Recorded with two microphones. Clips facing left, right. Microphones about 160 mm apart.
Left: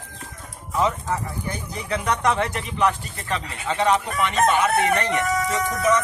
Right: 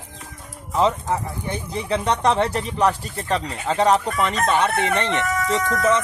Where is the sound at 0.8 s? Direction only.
25° right (ahead or behind).